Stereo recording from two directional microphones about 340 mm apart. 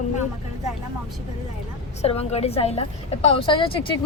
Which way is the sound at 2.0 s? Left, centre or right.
Centre.